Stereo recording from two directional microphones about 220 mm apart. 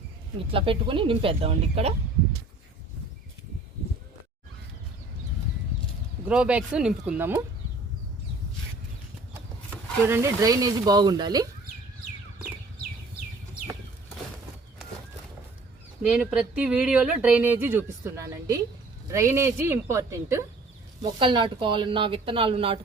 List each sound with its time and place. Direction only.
0.5 s speech: 25° right (ahead or behind)
6.2 s speech: 5° right (ahead or behind)
10.0 s speech: 10° right (ahead or behind)
16.1 s speech: 5° right (ahead or behind); by 22.8 s 25° right (ahead or behind)